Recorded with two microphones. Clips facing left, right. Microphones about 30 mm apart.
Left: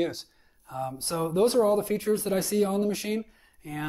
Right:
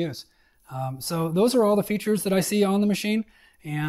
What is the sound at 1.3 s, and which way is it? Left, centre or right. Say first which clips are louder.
Speech: right 2 dB; right.